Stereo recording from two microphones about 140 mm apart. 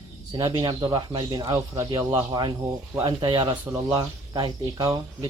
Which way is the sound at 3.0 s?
35° right (ahead or behind).